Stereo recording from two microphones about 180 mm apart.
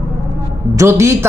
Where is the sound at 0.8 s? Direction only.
15° right (ahead or behind).